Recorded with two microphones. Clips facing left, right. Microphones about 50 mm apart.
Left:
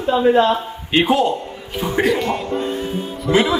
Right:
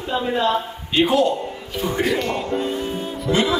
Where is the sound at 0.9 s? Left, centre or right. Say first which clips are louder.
Left 1 dB; left.